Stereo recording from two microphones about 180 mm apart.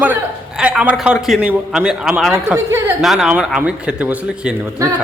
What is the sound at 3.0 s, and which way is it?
Speech, centre (ahead or behind).